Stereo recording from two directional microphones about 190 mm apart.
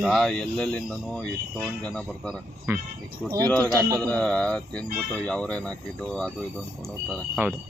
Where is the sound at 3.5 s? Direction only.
5° left (ahead or behind).